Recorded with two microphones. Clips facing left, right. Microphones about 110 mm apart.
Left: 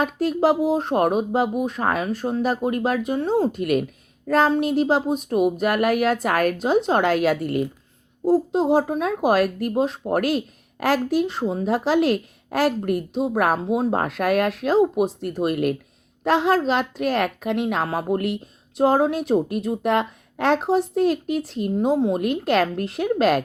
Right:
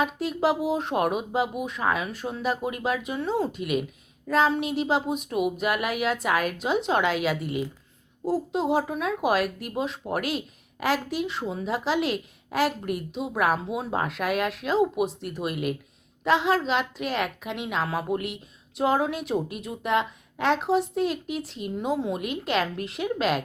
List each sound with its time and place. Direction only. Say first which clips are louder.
0.0 s speech: left 5 dB; 45° left (ahead or behind)
8.3 s speech: left 6 dB; 35° left (ahead or behind)